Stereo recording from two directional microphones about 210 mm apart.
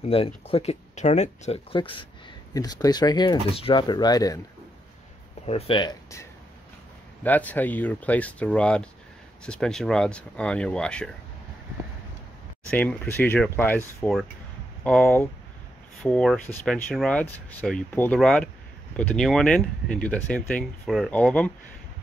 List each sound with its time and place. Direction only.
0.0 s speech: 25° left (ahead or behind)
5.5 s speech: 25° left (ahead or behind)
7.2 s speech: 10° left (ahead or behind)
12.7 s speech: 5° left (ahead or behind)